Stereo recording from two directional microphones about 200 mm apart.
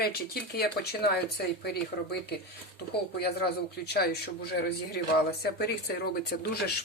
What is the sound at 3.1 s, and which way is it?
Speech, 50° left (ahead or behind).